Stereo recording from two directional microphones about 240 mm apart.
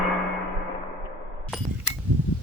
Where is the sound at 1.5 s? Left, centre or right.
Centre.